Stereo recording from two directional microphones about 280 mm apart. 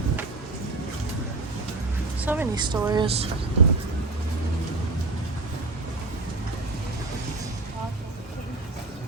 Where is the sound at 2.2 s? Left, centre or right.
Centre.